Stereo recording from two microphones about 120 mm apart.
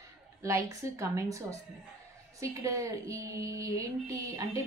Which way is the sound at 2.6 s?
25° right (ahead or behind).